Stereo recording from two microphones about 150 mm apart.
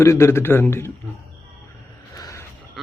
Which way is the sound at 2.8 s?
Centre (ahead or behind).